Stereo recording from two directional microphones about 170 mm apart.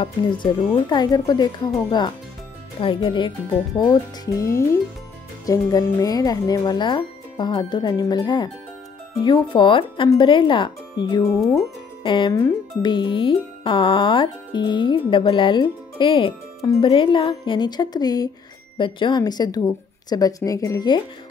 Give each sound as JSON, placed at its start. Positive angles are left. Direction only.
{"t": 0.0, "sound": "speech", "side_deg": 30}